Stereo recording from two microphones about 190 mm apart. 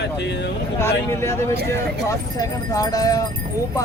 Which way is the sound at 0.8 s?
15° left (ahead or behind).